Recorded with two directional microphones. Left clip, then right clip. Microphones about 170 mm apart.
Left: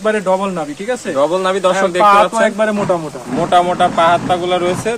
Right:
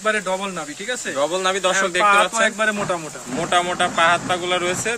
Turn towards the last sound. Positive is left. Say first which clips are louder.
# left 5 dB
turn(degrees=0)  # may be behind; listen again after turning